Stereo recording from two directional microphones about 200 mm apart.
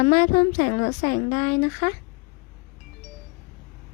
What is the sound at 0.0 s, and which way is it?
A woman's voice, 35° left (ahead or behind).